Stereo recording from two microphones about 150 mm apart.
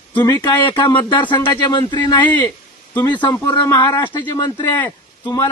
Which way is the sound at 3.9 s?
25° left (ahead or behind).